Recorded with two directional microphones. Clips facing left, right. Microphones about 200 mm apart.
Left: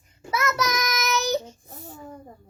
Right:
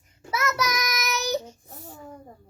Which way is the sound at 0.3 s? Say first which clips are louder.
Left 1 dB; 10° right (ahead or behind).